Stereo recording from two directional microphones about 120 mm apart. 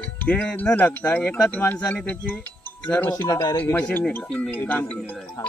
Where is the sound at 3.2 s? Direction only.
30° left (ahead or behind).